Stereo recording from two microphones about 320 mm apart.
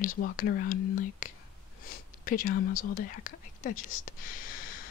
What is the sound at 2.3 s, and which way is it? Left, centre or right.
Speech, left.